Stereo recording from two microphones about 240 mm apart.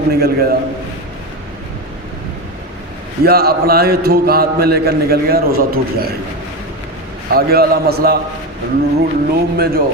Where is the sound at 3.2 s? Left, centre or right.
Right.